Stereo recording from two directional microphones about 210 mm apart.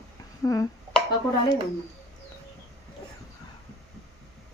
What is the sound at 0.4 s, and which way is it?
Speech, 15° left (ahead or behind).